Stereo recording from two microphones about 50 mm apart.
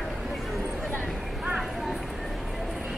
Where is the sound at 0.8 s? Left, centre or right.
Left.